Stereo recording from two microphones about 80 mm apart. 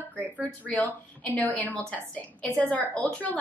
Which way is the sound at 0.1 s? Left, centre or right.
Centre.